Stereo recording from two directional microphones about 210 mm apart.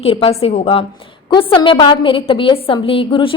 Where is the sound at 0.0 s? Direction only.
25° left (ahead or behind).